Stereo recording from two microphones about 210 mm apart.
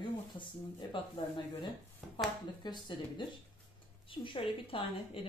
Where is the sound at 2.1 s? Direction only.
20° left (ahead or behind).